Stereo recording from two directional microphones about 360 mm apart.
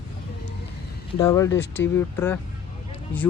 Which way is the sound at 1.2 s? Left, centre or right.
Centre.